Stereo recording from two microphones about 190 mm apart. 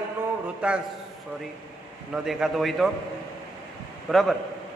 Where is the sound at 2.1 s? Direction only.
Centre (ahead or behind).